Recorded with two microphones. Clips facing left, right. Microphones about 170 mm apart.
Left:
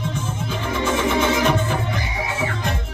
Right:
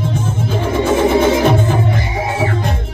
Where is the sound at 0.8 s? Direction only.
35° right (ahead or behind).